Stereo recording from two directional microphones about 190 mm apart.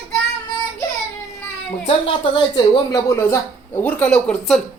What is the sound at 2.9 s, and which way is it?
Speech, 15° left (ahead or behind).